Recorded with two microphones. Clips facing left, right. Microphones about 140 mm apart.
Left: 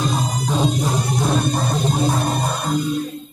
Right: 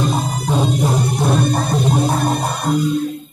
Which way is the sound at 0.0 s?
60° right (ahead or behind).